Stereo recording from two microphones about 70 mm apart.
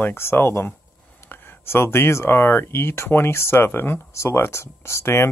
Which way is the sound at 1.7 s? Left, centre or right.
Left.